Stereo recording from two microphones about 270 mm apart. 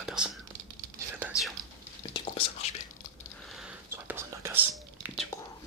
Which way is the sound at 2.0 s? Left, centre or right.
Centre.